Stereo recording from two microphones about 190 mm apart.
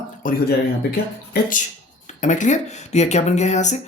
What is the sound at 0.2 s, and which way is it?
Speech, 45° left (ahead or behind).